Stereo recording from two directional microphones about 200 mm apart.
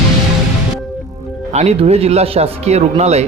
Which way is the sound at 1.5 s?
30° right (ahead or behind).